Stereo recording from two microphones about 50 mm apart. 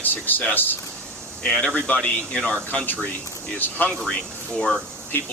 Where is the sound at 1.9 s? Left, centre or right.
Left.